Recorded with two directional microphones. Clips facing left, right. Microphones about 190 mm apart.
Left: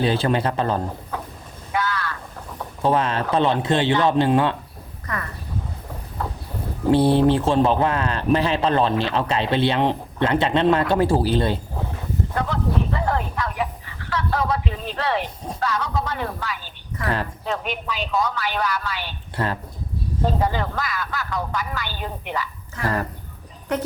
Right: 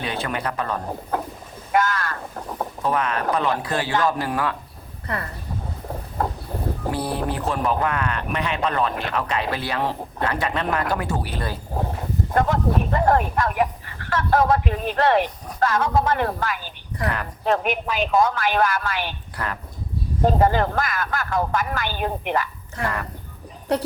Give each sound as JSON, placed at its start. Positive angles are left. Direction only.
{"t": 0.0, "sound": "a man's voice", "side_deg": 30}
{"t": 1.7, "sound": "a sound", "side_deg": -45}
{"t": 2.8, "sound": "a man's voice", "side_deg": 30}
{"t": 5.0, "sound": "speech", "side_deg": -30}
{"t": 6.9, "sound": "a man's voice", "side_deg": 30}
{"t": 12.3, "sound": "a sound", "side_deg": -50}
{"t": 15.6, "sound": "speech", "side_deg": -50}
{"t": 19.4, "sound": "a man's voice", "side_deg": 25}
{"t": 20.2, "sound": "speech", "side_deg": -55}
{"t": 22.8, "sound": "a man's voice", "side_deg": 35}
{"t": 23.7, "sound": "a woman's voice", "side_deg": -35}